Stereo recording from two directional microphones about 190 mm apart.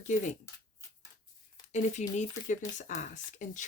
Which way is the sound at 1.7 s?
40° left (ahead or behind).